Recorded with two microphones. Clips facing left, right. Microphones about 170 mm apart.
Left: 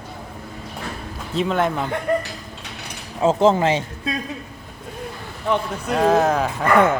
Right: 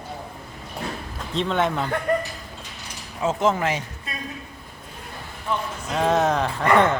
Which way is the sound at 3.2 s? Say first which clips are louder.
Left 6 dB; 30° left (ahead or behind).